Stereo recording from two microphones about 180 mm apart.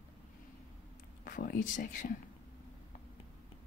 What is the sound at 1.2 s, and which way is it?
Speech, 50° left (ahead or behind).